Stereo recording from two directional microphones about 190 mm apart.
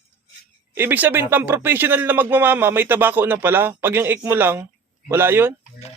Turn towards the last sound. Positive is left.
turn(degrees=-10)  # may be behind; listen again after turning